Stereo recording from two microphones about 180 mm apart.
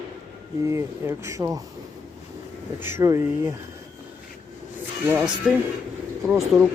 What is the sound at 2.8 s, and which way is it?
Speech, 15° right (ahead or behind).